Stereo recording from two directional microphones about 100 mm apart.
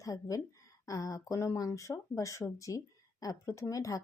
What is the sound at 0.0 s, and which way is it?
Speech, 35° left (ahead or behind).